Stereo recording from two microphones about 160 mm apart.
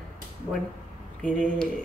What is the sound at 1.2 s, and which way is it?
Speech, 5° left (ahead or behind).